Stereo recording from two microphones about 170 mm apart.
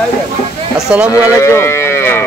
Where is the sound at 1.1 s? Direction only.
15° left (ahead or behind).